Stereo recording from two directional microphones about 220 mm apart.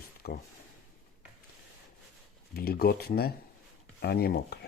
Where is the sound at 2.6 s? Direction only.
45° left (ahead or behind).